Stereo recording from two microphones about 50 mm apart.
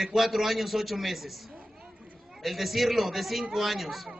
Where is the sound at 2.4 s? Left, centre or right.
Centre.